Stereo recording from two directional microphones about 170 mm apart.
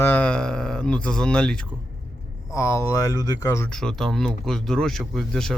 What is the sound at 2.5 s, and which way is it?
Speech, 15° left (ahead or behind).